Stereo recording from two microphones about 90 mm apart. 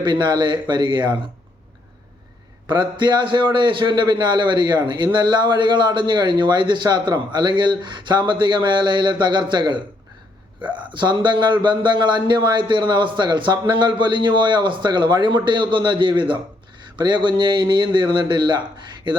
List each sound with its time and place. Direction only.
0.0 s speech: 60° right (ahead or behind)
2.6 s speech: 55° right (ahead or behind)
10.9 s speech: 60° right (ahead or behind)